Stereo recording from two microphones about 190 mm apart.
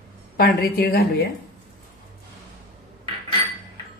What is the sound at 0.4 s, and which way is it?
Speech, 55° left (ahead or behind).